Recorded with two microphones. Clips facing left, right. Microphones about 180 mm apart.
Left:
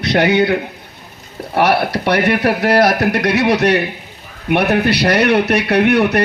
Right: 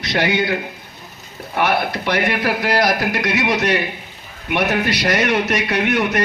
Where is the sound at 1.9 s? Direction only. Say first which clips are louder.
Left 5 dB; 65° left (ahead or behind).